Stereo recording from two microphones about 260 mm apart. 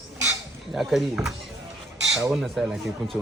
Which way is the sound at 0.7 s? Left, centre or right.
Centre.